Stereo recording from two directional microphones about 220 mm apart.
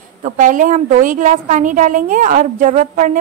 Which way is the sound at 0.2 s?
35° right (ahead or behind).